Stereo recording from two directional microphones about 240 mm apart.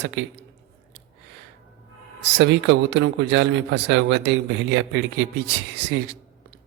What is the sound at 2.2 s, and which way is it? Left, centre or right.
A man's voice, right.